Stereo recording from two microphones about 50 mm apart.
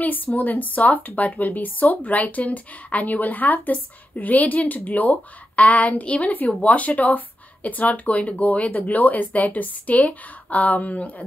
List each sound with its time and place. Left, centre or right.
0.0 s a woman's voice: left